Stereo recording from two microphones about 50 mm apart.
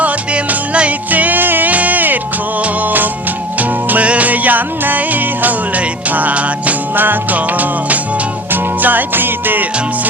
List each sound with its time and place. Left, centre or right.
0.0 s music: right